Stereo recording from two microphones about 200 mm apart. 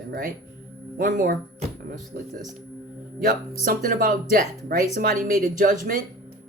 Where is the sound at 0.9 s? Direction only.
45° right (ahead or behind).